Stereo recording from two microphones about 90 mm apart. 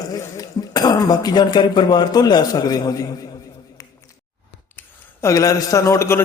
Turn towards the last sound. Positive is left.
turn(degrees=30)  # may be behind; listen again after turning